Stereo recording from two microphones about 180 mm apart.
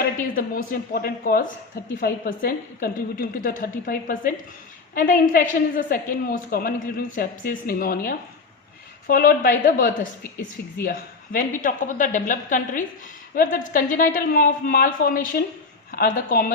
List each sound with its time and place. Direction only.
0.0 s a woman's voice: 50° left (ahead or behind)